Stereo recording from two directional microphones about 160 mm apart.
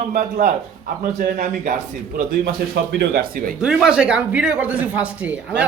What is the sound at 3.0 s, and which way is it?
Speech, 70° right (ahead or behind).